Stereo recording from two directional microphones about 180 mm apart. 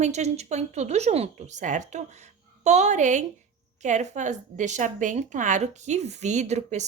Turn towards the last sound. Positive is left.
turn(degrees=-40)  # may be behind; listen again after turning